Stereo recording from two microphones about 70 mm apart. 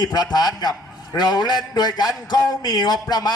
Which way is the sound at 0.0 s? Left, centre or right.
Left.